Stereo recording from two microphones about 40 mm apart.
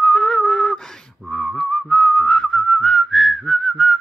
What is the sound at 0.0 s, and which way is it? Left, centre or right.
Whistling, left.